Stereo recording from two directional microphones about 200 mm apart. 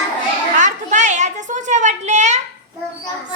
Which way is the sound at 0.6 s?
35° right (ahead or behind).